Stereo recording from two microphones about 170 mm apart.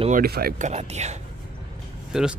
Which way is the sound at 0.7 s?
40° right (ahead or behind).